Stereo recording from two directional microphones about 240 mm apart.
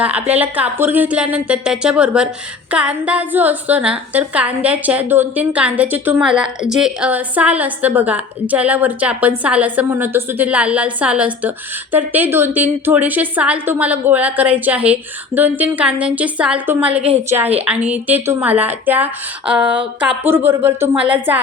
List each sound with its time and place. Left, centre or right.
0.0 s a woman's voice: centre
17.0 s a woman's voice: right
17.3 s a woman's voice: centre